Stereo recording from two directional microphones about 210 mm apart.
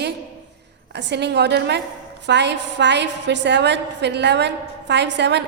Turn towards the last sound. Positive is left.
turn(degrees=-55)  # may be behind; listen again after turning